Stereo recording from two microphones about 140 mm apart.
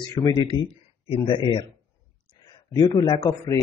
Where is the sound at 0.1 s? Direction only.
25° left (ahead or behind).